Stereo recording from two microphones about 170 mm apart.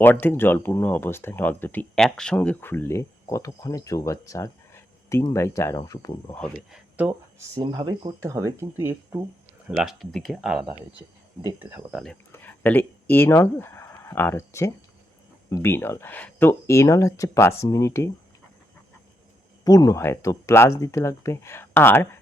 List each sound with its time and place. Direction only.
0.0 s speech: 10° left (ahead or behind)
6.3 s speech: 5° left (ahead or behind); by 7.4 s 10° right (ahead or behind)
7.5 s speech: 25° right (ahead or behind)
9.6 s speech: 5° right (ahead or behind)
12.3 s speech: 10° left (ahead or behind)
19.6 s speech: 20° left (ahead or behind)